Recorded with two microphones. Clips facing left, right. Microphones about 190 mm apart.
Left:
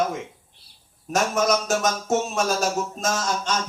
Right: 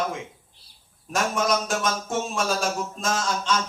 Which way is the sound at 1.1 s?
45° left (ahead or behind).